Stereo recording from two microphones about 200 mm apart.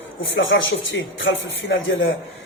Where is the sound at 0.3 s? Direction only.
65° left (ahead or behind).